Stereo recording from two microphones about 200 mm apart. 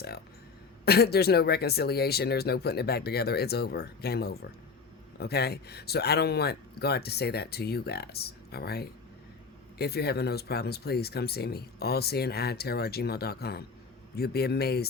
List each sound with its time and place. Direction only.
0.9 s speech: 55° left (ahead or behind)